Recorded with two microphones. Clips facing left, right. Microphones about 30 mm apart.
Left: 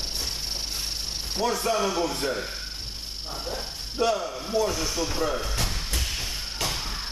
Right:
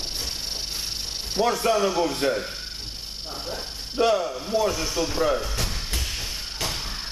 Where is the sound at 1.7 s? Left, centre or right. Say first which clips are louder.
Right 3 dB; centre.